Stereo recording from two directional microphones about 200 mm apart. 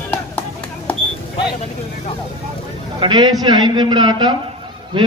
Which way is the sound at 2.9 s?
20° right (ahead or behind).